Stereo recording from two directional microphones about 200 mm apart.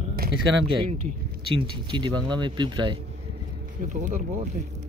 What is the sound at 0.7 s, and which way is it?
Speech, 25° right (ahead or behind).